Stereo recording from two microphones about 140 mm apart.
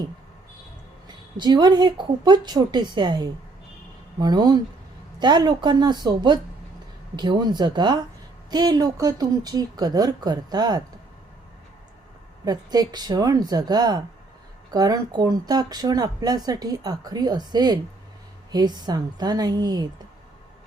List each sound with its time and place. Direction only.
1.0 s speech: 30° right (ahead or behind)
12.5 s speech: 30° right (ahead or behind)